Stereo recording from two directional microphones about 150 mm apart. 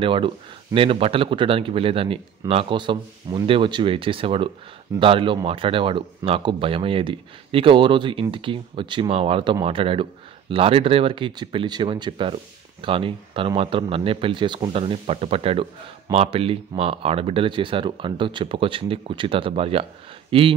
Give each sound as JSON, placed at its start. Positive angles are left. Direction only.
{"t": 0.0, "sound": "speech", "side_deg": -35}